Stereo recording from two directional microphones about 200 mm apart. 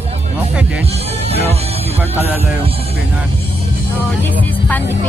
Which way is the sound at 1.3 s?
30° right (ahead or behind).